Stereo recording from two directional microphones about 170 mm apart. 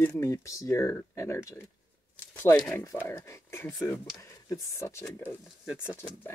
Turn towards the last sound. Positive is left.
turn(degrees=10)  # may be behind; listen again after turning